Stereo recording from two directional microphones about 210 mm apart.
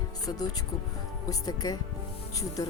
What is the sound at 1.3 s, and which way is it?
Speech, 20° left (ahead or behind).